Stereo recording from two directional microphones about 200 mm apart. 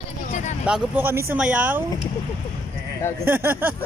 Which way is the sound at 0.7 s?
5° right (ahead or behind).